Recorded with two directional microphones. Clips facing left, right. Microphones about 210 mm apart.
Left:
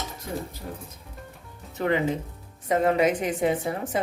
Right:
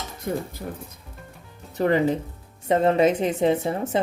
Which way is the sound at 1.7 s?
35° right (ahead or behind).